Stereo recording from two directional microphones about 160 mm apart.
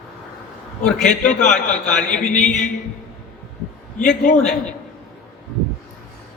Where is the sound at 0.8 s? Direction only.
5° left (ahead or behind).